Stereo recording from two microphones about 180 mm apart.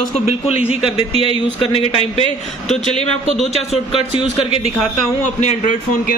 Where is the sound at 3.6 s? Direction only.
30° left (ahead or behind).